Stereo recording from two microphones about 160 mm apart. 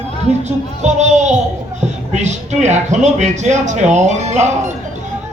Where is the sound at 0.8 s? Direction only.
45° right (ahead or behind).